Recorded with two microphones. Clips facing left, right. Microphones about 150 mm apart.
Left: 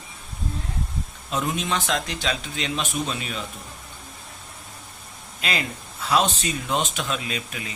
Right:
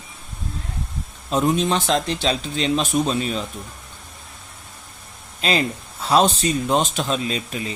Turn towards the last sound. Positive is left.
turn(degrees=-30)  # may be behind; listen again after turning